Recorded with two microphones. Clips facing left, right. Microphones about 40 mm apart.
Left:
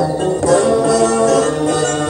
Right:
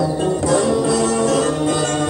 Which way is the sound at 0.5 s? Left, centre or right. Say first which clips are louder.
Left 5 dB; left.